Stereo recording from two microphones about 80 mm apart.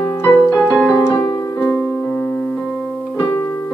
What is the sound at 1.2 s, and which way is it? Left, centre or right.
Music, left.